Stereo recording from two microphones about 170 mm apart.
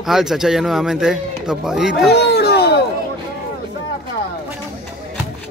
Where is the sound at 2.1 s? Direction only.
75° left (ahead or behind).